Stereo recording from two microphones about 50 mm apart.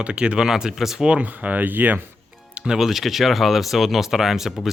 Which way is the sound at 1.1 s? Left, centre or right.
Right.